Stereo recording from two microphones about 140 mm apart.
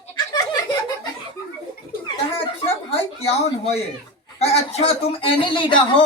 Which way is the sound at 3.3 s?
50° left (ahead or behind).